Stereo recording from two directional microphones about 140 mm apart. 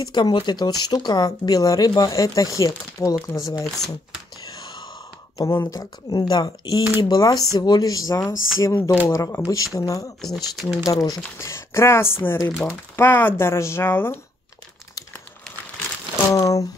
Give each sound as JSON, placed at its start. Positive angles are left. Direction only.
{"t": 0.0, "sound": "speech", "side_deg": 30}
{"t": 5.4, "sound": "speech", "side_deg": 20}
{"t": 10.2, "sound": "speech", "side_deg": 0}
{"t": 10.9, "sound": "speech", "side_deg": 25}
{"t": 16.3, "sound": "speech", "side_deg": 25}